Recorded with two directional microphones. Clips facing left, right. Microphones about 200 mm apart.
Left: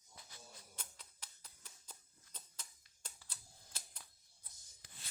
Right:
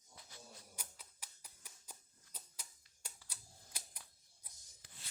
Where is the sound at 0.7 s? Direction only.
10° right (ahead or behind).